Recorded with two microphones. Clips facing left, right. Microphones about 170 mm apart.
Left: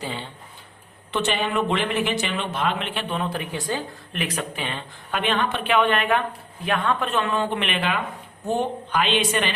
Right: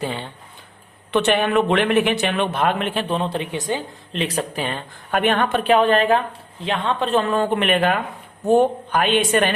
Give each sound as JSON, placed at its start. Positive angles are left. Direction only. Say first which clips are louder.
{"t": 0.0, "sound": "speech", "louder": "right 5 dB", "side_deg": -55}
{"t": 3.2, "sound": "a man's voice", "louder": "right 4 dB", "side_deg": -25}